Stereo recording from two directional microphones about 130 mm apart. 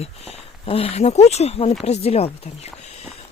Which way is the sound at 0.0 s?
50° left (ahead or behind).